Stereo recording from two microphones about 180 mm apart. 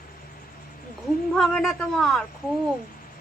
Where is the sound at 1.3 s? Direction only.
5° left (ahead or behind).